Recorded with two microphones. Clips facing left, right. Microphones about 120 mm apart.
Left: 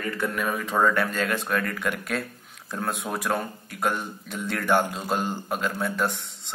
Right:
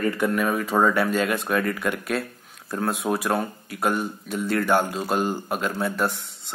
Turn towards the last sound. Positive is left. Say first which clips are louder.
# right 2 dB
turn(degrees=-5)  # may be behind; listen again after turning